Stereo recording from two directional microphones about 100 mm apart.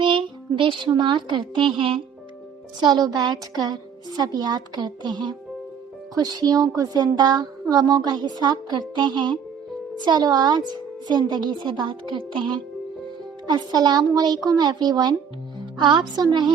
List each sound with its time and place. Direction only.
0.0 s a child's voice: 60° right (ahead or behind)
2.8 s a woman's voice: 45° right (ahead or behind)